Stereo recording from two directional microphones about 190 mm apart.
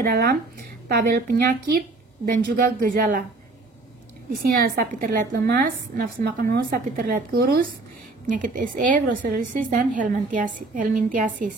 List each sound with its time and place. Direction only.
0.0 s a woman's voice: 55° right (ahead or behind)
4.4 s a woman's voice: 50° right (ahead or behind)